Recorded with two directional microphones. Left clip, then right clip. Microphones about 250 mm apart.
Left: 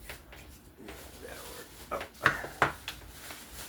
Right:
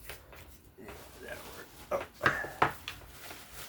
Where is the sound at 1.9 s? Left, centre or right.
Right.